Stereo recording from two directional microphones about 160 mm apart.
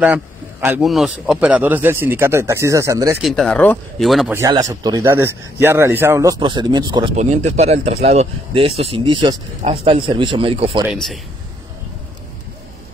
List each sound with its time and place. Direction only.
0.0 s a man's voice: 5° right (ahead or behind)
3.2 s speech: centre (ahead or behind)
4.3 s speech: 20° right (ahead or behind)
7.2 s speech: 45° right (ahead or behind)
10.9 s speech: centre (ahead or behind)